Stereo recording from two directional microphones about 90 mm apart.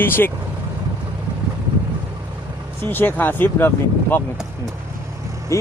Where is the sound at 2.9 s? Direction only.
20° left (ahead or behind).